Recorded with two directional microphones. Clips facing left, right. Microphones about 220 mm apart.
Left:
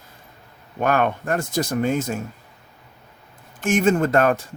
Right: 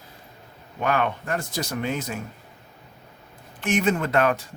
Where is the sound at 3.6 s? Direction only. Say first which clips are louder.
Left 4 dB; 45° left (ahead or behind).